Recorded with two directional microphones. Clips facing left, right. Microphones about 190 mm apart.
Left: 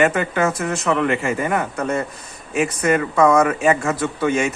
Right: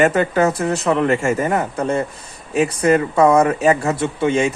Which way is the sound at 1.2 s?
45° right (ahead or behind).